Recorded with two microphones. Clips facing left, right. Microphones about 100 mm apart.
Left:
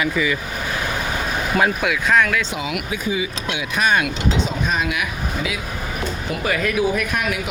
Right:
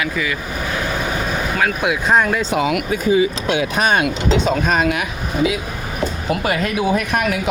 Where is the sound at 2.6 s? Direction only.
45° right (ahead or behind).